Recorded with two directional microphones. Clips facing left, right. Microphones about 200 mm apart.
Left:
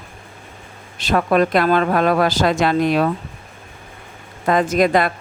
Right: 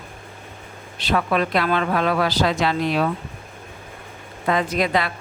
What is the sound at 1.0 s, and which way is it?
A woman's voice, 45° left (ahead or behind).